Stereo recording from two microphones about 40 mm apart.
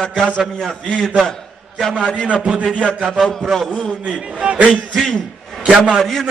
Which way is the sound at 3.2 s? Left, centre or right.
Centre.